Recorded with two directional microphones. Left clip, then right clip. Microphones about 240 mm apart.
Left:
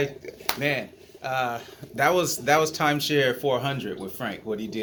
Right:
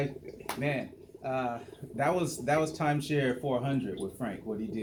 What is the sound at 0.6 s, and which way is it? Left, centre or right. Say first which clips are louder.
Speech: left 5 dB; left.